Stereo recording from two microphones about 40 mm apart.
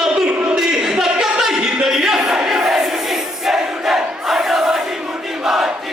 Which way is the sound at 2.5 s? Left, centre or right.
Centre.